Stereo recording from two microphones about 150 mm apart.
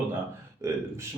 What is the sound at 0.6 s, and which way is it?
Speech, 15° right (ahead or behind).